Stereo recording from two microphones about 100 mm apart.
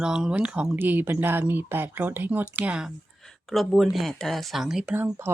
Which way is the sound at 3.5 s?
Centre (ahead or behind).